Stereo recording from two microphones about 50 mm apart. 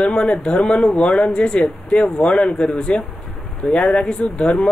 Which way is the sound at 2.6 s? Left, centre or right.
Centre.